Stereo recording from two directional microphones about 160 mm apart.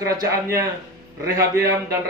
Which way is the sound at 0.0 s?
20° right (ahead or behind).